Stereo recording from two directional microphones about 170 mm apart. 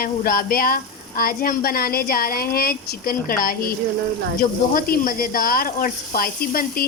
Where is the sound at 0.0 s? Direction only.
60° left (ahead or behind).